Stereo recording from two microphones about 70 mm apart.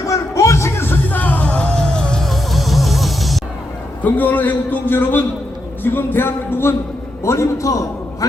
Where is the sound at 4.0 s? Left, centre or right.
Left.